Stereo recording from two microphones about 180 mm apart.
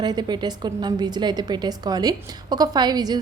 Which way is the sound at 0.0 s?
25° right (ahead or behind).